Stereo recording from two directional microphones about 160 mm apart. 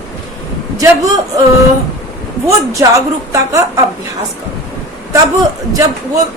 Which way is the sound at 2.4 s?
20° right (ahead or behind).